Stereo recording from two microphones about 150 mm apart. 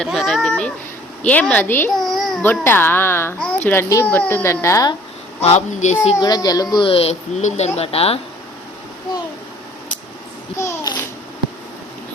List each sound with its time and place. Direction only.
0.0 s a child's voice: centre (ahead or behind); by 4.9 s 20° left (ahead or behind)
5.4 s a child's voice: 50° left (ahead or behind)
6.1 s speech: 25° left (ahead or behind)
10.6 s babbling: 20° left (ahead or behind)